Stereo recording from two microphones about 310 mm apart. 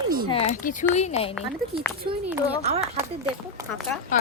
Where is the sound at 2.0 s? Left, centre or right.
Centre.